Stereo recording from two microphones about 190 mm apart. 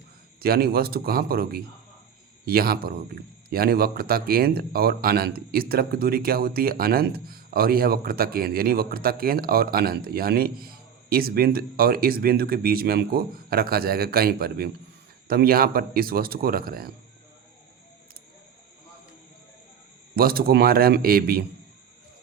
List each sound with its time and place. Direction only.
0.3 s a man's voice: 55° right (ahead or behind)
20.1 s a man's voice: 50° right (ahead or behind)